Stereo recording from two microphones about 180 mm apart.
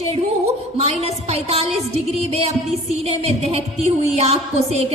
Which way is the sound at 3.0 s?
35° right (ahead or behind).